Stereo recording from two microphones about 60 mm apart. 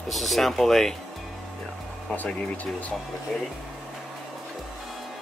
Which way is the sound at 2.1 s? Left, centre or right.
Left.